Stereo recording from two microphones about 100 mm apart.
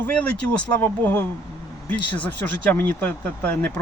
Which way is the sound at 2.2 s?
20° left (ahead or behind).